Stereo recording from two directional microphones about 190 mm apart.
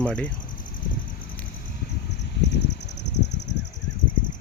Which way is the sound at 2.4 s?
65° left (ahead or behind).